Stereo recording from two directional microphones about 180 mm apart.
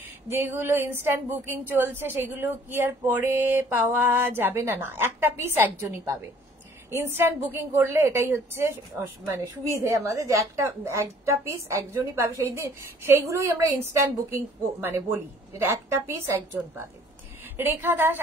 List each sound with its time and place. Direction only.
0.3 s a woman's voice: 15° right (ahead or behind)
9.8 s a woman's voice: 15° right (ahead or behind)